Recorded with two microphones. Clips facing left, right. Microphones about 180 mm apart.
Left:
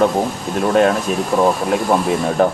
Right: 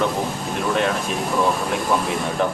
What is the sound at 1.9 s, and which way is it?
Speech, 40° left (ahead or behind).